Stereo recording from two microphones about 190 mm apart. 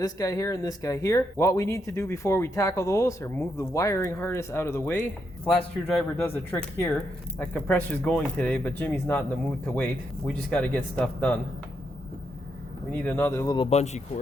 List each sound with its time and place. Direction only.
0.0 s speech: 20° left (ahead or behind)
6.2 s speech: 10° left (ahead or behind)
12.9 s speech: 10° left (ahead or behind)
13.7 s speech: 35° left (ahead or behind)